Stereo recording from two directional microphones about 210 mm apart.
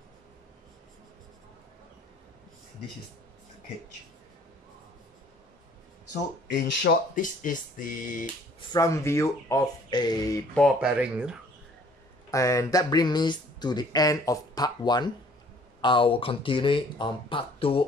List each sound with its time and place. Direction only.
7.2 s speech: 40° left (ahead or behind)
8.5 s speech: 15° left (ahead or behind)
10.5 s speech: centre (ahead or behind)
12.3 s speech: 15° left (ahead or behind)